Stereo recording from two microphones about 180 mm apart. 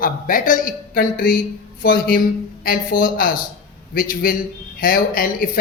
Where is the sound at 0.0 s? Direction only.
50° left (ahead or behind).